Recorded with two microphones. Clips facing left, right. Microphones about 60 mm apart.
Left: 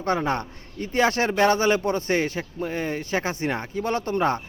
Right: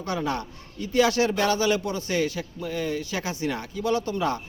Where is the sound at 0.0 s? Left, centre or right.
Left.